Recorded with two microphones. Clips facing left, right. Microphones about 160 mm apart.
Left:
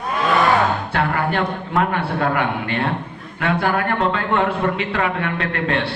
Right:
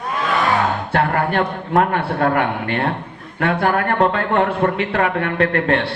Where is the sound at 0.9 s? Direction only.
45° right (ahead or behind).